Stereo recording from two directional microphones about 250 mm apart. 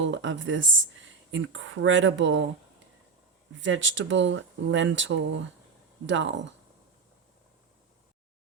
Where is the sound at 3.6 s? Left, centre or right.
Right.